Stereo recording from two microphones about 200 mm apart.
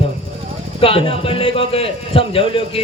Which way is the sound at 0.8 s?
25° left (ahead or behind).